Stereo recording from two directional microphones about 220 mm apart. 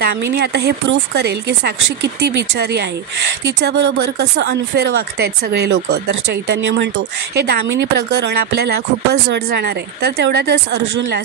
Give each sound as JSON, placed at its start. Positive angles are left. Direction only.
{"t": 0.0, "sound": "speech", "side_deg": -45}